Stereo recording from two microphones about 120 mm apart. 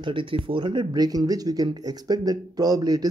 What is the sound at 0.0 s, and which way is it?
Speech, 45° right (ahead or behind).